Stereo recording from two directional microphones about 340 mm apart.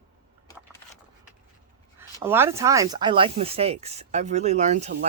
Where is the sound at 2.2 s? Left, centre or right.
Centre.